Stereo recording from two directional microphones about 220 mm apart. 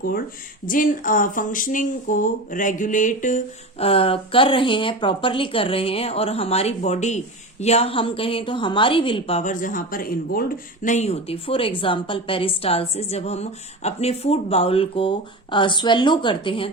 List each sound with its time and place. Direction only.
0.6 s speech: 40° left (ahead or behind)